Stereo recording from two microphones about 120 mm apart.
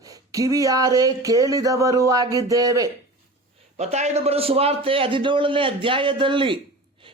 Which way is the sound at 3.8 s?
65° right (ahead or behind).